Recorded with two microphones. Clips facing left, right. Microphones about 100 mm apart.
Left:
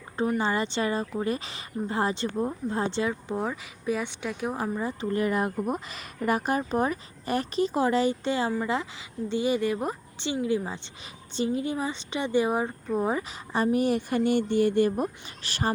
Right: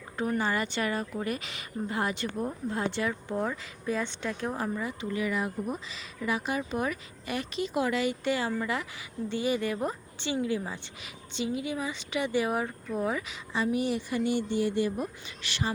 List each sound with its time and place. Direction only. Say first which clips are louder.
0.3 s a woman's voice: left 2 dB; 25° left (ahead or behind)
3.1 s speech: left 1 dB; 15° left (ahead or behind)
4.8 s a woman's voice: left 4 dB; 35° left (ahead or behind)
11.3 s a woman's voice: left 4 dB; 40° left (ahead or behind)
13.5 s speech: left 4 dB; 50° left (ahead or behind)